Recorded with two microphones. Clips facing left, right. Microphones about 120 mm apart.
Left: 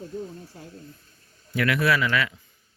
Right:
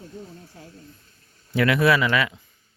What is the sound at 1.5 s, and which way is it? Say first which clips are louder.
Speech: right 4 dB; 25° right (ahead or behind).